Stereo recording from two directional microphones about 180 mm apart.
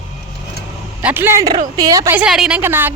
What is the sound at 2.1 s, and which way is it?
Speech, 5° right (ahead or behind).